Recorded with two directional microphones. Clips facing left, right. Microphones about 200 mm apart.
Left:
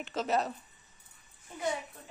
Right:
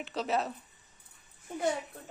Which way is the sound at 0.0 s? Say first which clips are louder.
Left 1 dB; centre (ahead or behind).